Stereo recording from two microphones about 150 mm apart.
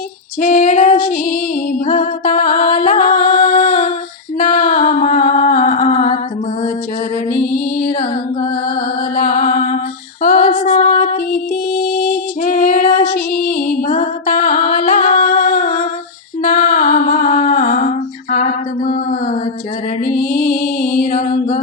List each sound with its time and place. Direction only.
0.4 s female singing: 60° left (ahead or behind)
1.1 s music: 65° left (ahead or behind)
7.3 s music: 60° left (ahead or behind)
9.1 s music: 75° left (ahead or behind)
10.2 s female singing: 70° left (ahead or behind)
13.0 s music: 60° left (ahead or behind)
20.1 s music: 75° left (ahead or behind)